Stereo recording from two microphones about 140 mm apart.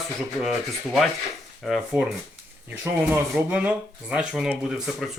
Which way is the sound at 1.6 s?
Centre (ahead or behind).